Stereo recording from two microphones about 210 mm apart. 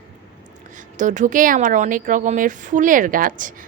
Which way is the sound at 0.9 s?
35° right (ahead or behind).